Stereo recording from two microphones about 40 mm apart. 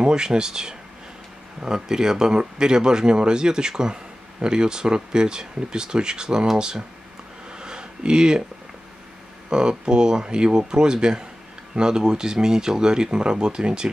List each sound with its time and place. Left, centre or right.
0.0 s speech: centre
7.5 s a sound: right
9.5 s speech: centre